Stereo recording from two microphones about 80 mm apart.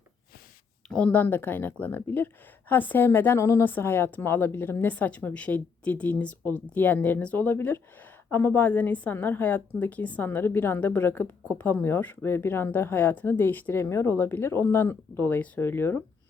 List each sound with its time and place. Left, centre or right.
0.9 s a woman's voice: centre